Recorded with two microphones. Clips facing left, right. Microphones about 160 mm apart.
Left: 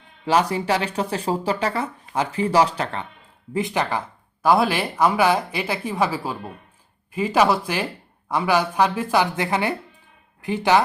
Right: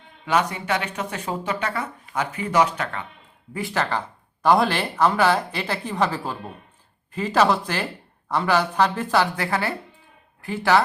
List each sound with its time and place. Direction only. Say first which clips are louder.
0.3 s speech: left 3 dB; 35° left (ahead or behind)
3.5 s speech: left 2 dB; 15° left (ahead or behind)